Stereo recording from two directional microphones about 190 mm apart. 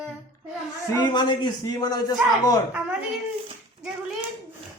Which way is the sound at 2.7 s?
10° right (ahead or behind).